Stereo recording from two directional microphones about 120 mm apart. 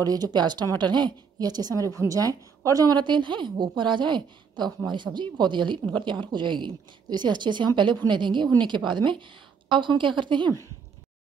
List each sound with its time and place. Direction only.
0.0 s a woman's voice: 35° right (ahead or behind)